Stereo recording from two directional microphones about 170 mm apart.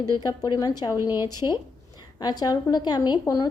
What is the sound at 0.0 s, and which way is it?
Speech, 25° left (ahead or behind).